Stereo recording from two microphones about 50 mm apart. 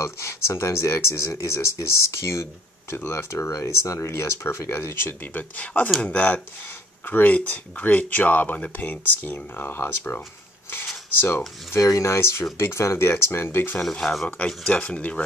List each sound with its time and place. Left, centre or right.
0.0 s speech: left
3.1 s speech: left
5.2 s speech: left
11.1 s speech: left
11.8 s speech: left
13.7 s speech: centre
14.7 s speech: left